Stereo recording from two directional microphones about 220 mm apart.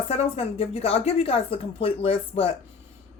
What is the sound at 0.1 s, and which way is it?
A woman's voice, 25° left (ahead or behind).